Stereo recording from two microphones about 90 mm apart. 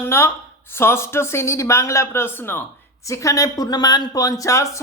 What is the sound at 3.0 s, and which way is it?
Speech, 35° left (ahead or behind).